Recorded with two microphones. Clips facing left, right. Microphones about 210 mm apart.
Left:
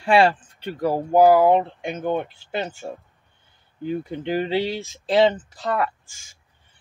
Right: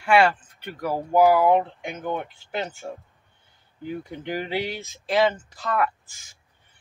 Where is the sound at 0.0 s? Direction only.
30° left (ahead or behind).